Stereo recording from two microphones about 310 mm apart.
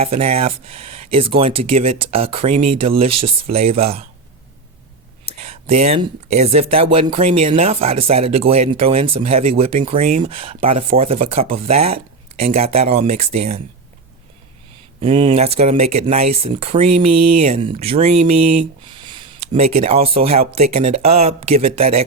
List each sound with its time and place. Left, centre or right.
0.0 s speech: centre
5.4 s speech: centre
15.0 s speech: centre
17.1 s speech: right
17.4 s speech: centre
18.9 s a sound: centre
19.8 s speech: centre